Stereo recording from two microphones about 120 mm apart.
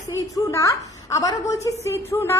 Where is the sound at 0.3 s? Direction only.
25° left (ahead or behind).